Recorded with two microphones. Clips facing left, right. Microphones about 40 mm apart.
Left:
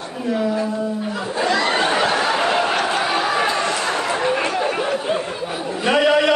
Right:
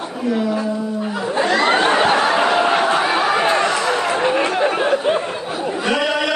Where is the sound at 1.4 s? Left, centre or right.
Right.